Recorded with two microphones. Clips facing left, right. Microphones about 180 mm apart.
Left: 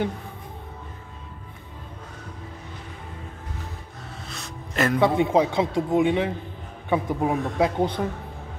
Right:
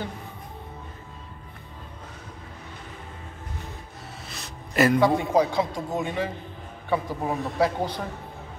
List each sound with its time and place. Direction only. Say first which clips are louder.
4.3 s music: left 1 dB; 5° right (ahead or behind)
5.0 s a man's voice: left 1 dB; 20° left (ahead or behind)